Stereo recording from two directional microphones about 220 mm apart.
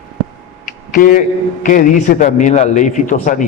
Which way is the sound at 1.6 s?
35° left (ahead or behind).